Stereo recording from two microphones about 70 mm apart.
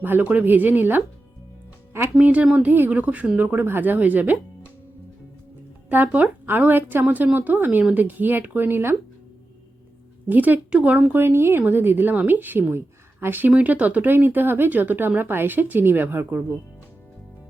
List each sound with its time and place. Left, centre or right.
0.0 s speech: right
2.2 s speech: right
5.9 s speech: right
10.2 s a woman's voice: right
11.1 s speech: right
13.5 s speech: centre